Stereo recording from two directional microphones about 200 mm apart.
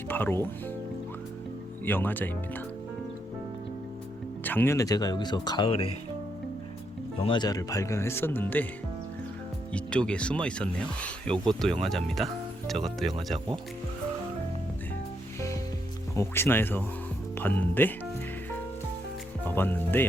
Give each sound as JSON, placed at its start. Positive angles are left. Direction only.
{"t": 0.1, "sound": "speech", "side_deg": 10}
{"t": 1.8, "sound": "speech", "side_deg": 10}
{"t": 4.4, "sound": "speech", "side_deg": 10}
{"t": 7.2, "sound": "speech", "side_deg": 25}
{"t": 9.7, "sound": "speech", "side_deg": 5}
{"t": 15.4, "sound": "music", "side_deg": 15}
{"t": 16.1, "sound": "speech", "side_deg": 10}
{"t": 19.5, "sound": "speech", "side_deg": 10}